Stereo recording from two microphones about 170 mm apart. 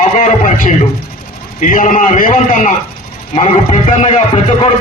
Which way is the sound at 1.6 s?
50° left (ahead or behind).